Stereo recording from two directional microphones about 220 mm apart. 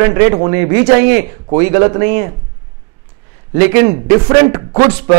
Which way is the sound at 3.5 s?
15° right (ahead or behind).